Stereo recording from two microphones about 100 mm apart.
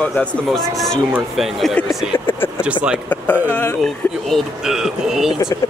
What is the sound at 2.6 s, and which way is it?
Speech, 10° right (ahead or behind).